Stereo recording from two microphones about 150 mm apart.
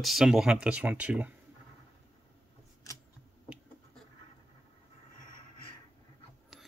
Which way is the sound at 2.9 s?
20° left (ahead or behind).